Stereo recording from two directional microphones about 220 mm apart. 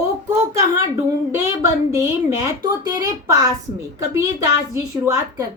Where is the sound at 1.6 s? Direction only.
15° right (ahead or behind).